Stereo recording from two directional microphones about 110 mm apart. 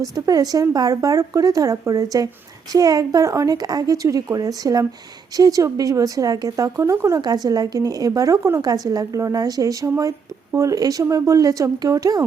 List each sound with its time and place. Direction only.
0.0 s a woman's voice: 35° right (ahead or behind)